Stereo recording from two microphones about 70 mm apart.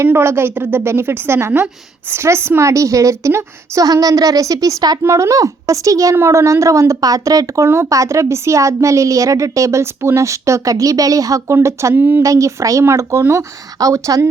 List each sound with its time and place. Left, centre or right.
0.1 s a woman's voice: right
3.8 s speech: right
5.0 s a woman's voice: right
6.1 s a woman's voice: right
11.9 s speech: right
12.2 s a woman's voice: right